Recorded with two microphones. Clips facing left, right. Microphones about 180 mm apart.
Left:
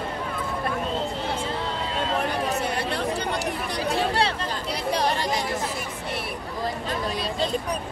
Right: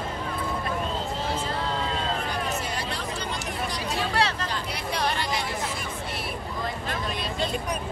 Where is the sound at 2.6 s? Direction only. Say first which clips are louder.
Left 5 dB; 60° left (ahead or behind).